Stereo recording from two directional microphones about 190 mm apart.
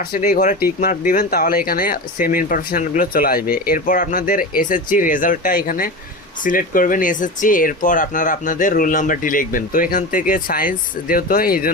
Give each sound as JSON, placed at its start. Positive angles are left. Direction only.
{"t": 0.1, "sound": "speech", "side_deg": 45}